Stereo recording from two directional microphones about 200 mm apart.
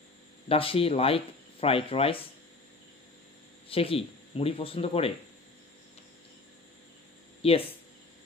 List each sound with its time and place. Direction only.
0.5 s speech: 30° left (ahead or behind)
3.6 s speech: 30° left (ahead or behind)
7.4 s speech: 30° left (ahead or behind)